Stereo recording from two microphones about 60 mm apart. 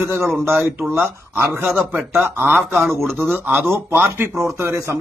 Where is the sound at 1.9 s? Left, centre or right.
Right.